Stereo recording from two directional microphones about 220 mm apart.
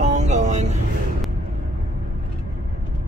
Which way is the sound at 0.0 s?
30° right (ahead or behind).